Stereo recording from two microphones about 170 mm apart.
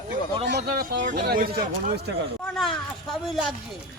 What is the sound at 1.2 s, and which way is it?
Speech, 60° right (ahead or behind).